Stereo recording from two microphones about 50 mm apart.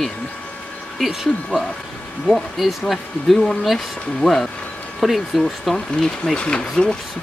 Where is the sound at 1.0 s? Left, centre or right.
Centre.